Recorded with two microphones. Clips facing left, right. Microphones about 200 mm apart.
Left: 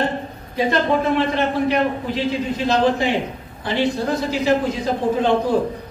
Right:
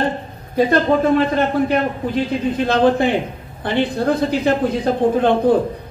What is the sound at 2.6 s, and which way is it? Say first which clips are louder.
A man's voice: right 3 dB; 55° right (ahead or behind).